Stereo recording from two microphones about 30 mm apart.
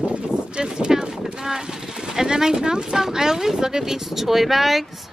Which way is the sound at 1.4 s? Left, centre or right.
Centre.